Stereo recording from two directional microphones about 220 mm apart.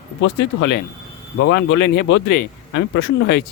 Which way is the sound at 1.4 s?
55° left (ahead or behind).